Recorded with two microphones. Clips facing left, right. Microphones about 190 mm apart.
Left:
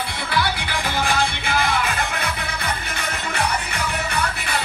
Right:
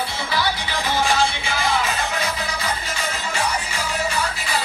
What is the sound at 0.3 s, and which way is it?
Music, 55° left (ahead or behind).